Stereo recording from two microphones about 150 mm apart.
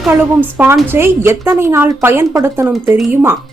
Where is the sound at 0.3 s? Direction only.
15° right (ahead or behind).